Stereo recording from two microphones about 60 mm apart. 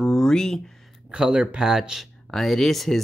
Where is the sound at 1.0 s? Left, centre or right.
Centre.